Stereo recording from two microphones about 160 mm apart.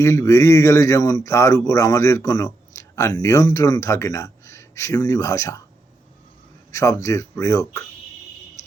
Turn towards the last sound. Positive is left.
turn(degrees=20)  # may be behind; listen again after turning